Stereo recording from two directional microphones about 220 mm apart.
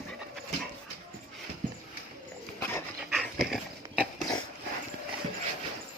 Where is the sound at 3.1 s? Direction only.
Centre (ahead or behind).